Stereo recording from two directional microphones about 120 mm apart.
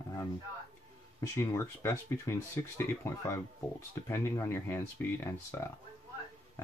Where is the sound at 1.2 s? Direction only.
25° left (ahead or behind).